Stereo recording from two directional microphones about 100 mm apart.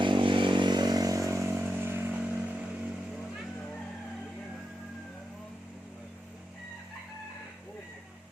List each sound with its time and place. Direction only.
0.0 s vehicle: 55° right (ahead or behind); by 2.6 s 15° right (ahead or behind)